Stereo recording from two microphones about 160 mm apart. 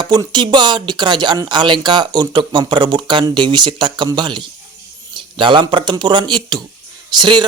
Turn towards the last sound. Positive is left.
turn(degrees=-30)  # may be behind; listen again after turning